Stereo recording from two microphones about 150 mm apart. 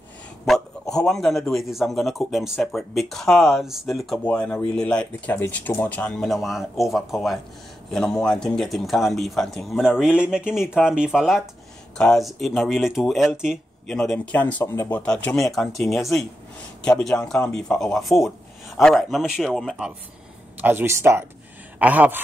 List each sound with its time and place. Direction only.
0.5 s a man's voice: 5° left (ahead or behind)
20.5 s speech: 15° right (ahead or behind)